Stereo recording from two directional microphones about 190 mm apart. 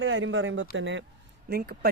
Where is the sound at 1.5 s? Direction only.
60° right (ahead or behind).